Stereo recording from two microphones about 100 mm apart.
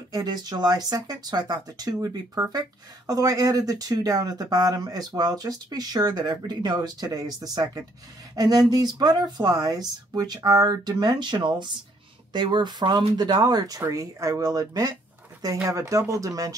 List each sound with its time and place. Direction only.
0.1 s speech: 45° right (ahead or behind)